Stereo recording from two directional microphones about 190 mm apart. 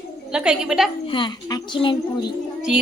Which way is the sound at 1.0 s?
25° left (ahead or behind).